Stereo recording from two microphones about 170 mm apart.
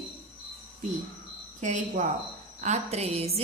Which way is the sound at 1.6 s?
45° right (ahead or behind).